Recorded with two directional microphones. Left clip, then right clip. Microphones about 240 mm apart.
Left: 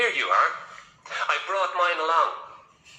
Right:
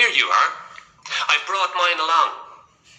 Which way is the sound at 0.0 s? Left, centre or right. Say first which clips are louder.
Right 5 dB; right.